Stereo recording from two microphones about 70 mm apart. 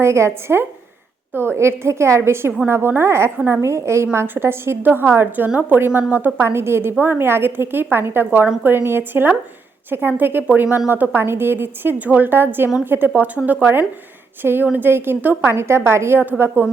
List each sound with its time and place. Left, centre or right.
0.0 s a woman's voice: right
3.3 s speech: right
3.6 s a woman's voice: right